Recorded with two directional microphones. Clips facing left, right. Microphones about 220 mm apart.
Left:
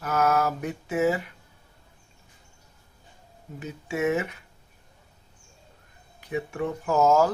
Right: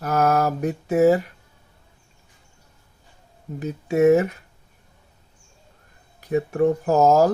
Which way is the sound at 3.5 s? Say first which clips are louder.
Right 9 dB; 40° right (ahead or behind).